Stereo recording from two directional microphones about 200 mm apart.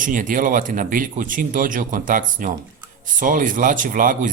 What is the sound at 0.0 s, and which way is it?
Speech, 40° right (ahead or behind).